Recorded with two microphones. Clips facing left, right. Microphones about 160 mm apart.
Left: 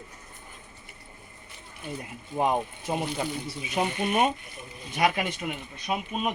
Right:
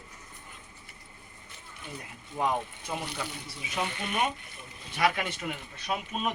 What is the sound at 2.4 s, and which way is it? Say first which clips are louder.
Speech: left 4 dB; 20° left (ahead or behind).